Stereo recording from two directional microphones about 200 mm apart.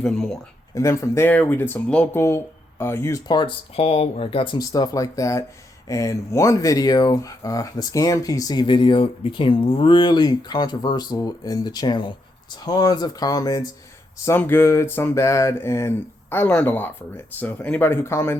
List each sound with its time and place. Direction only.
0.0 s speech: 5° left (ahead or behind)
0.7 s speech: 15° left (ahead or behind)